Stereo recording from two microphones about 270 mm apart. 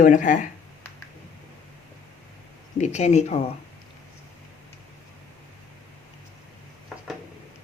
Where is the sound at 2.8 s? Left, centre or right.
Left.